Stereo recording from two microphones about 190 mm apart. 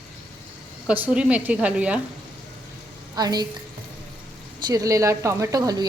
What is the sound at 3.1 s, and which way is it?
Speech, 20° right (ahead or behind).